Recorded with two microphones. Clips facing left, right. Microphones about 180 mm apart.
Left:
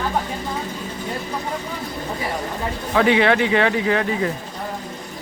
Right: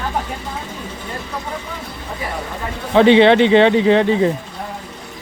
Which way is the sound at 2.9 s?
25° right (ahead or behind).